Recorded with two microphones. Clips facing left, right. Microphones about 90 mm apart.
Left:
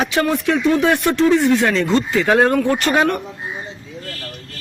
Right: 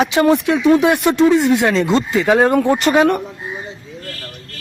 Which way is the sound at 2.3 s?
5° right (ahead or behind).